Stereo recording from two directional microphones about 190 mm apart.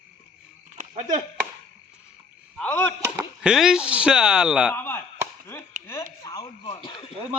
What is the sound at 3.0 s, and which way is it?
Speech, 15° right (ahead or behind).